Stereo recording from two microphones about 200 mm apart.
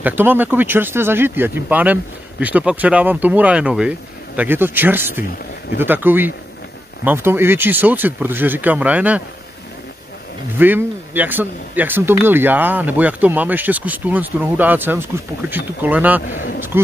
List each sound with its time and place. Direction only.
0.0 s speech: 10° right (ahead or behind)
10.6 s speech: 10° right (ahead or behind)
16.3 s a man's voice: 45° left (ahead or behind)